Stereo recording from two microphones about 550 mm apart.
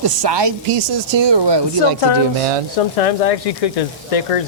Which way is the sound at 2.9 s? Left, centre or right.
Left.